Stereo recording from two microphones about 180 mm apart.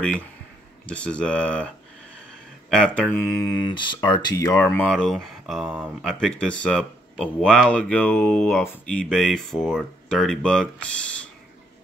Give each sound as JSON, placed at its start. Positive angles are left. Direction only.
{"t": 0.8, "sound": "a sound", "side_deg": 5}
{"t": 2.7, "sound": "speech", "side_deg": 5}
{"t": 3.3, "sound": "speech", "side_deg": 20}
{"t": 4.8, "sound": "speech", "side_deg": 5}
{"t": 7.7, "sound": "a sound", "side_deg": 10}
{"t": 8.6, "sound": "speech", "side_deg": 5}